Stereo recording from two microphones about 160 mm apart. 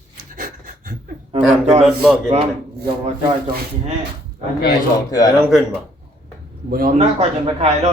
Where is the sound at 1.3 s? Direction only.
45° right (ahead or behind).